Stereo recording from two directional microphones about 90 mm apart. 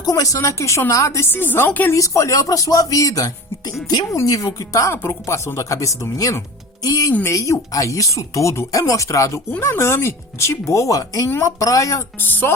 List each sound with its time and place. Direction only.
0.0 s a woman's voice: 40° left (ahead or behind); by 2.0 s 20° left (ahead or behind)
2.0 s speech: 35° left (ahead or behind)
12.2 s a woman's voice: 25° left (ahead or behind)